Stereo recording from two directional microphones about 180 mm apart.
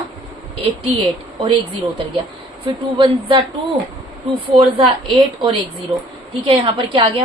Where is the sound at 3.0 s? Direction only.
30° right (ahead or behind).